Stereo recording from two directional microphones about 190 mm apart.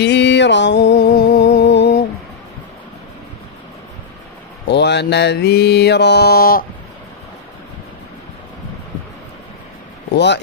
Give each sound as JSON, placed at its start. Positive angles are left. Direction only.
{"t": 0.0, "sound": "music", "side_deg": 65}
{"t": 4.6, "sound": "mantra", "side_deg": 65}
{"t": 10.1, "sound": "mantra", "side_deg": 65}